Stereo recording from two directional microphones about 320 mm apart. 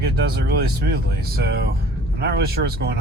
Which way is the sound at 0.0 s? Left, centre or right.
Right.